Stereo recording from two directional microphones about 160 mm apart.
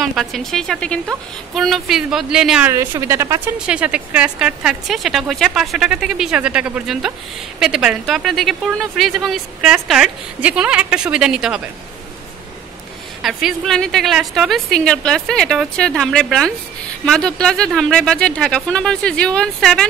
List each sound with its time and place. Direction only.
0.0 s a woman's voice: centre (ahead or behind)
2.7 s speech: 15° right (ahead or behind)
3.5 s a woman's voice: 5° right (ahead or behind)
13.2 s a woman's voice: 5° right (ahead or behind)